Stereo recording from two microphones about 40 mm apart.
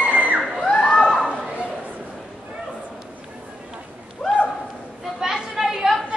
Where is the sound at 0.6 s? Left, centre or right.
Centre.